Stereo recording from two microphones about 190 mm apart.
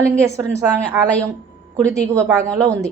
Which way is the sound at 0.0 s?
15° right (ahead or behind).